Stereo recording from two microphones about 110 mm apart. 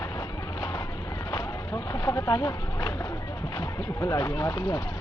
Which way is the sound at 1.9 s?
40° left (ahead or behind).